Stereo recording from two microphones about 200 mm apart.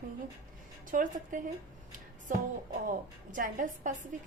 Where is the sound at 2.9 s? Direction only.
45° right (ahead or behind).